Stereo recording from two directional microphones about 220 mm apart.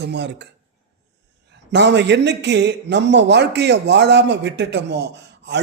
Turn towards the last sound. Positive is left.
turn(degrees=-50)  # may be behind; listen again after turning